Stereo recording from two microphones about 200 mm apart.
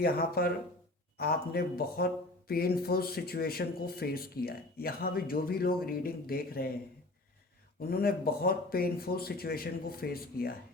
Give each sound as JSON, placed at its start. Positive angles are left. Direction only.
{"t": 0.0, "sound": "speech", "side_deg": 50}
{"t": 7.8, "sound": "speech", "side_deg": 50}